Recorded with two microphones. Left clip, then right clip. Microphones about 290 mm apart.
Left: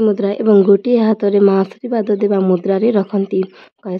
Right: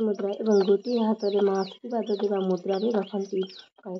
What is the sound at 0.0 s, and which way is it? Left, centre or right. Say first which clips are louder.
Speech: left 12 dB; left.